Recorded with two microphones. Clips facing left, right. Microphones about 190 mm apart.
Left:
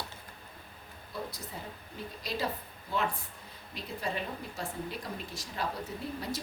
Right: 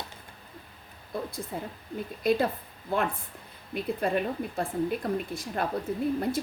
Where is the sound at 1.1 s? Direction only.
50° right (ahead or behind).